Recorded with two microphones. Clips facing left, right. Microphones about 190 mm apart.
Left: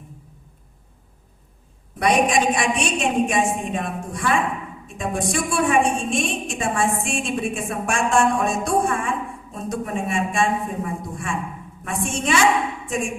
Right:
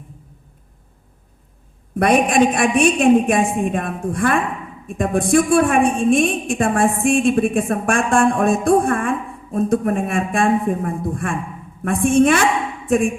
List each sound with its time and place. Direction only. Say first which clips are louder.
2.0 s a woman's voice: right 4 dB; 55° right (ahead or behind)